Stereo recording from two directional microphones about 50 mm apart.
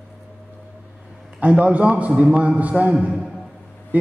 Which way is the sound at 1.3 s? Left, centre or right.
Right.